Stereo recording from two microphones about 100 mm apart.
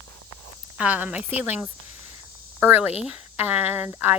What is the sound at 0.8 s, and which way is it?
Speech, 15° right (ahead or behind).